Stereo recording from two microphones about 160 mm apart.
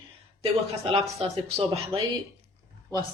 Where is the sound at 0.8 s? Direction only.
35° right (ahead or behind).